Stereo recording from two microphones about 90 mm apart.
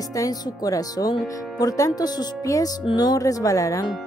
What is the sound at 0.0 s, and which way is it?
Speech, 40° left (ahead or behind).